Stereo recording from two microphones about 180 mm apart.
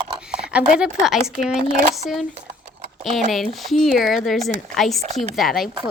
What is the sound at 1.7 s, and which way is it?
Speech, 45° right (ahead or behind).